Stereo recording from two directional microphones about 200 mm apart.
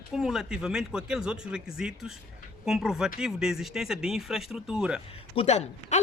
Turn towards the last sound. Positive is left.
turn(degrees=35)  # may be behind; listen again after turning